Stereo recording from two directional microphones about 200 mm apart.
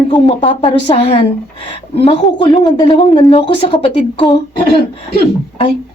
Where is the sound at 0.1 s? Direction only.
25° left (ahead or behind).